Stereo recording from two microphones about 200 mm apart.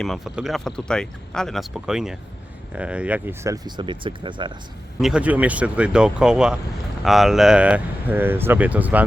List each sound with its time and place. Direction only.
0.0 s speech: centre (ahead or behind); by 4.5 s 25° right (ahead or behind)
4.9 s speech: 5° right (ahead or behind)